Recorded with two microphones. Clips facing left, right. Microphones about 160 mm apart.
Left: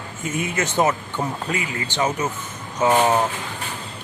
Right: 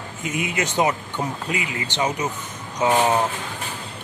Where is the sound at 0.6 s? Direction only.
15° right (ahead or behind).